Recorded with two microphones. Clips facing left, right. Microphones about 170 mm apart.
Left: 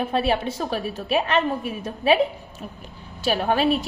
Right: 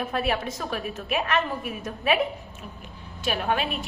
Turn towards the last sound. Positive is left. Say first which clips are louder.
# left 6 dB
turn(degrees=35)  # may be behind; listen again after turning